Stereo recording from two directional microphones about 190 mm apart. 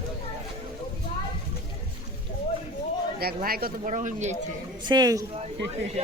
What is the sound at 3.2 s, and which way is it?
Speech, 55° right (ahead or behind).